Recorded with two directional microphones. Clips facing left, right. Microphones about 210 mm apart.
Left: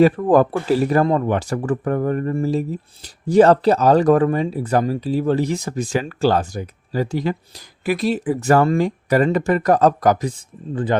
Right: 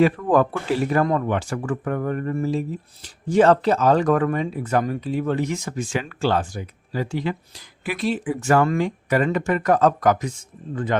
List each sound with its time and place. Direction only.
0.0 s speech: 35° left (ahead or behind)